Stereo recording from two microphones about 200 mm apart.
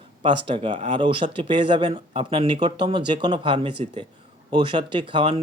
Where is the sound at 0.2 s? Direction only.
25° right (ahead or behind).